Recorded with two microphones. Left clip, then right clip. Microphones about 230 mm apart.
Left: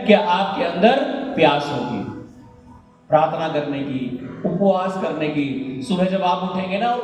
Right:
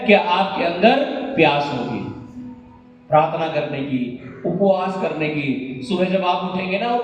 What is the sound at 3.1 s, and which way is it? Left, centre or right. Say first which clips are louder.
Speech: right 1 dB; left.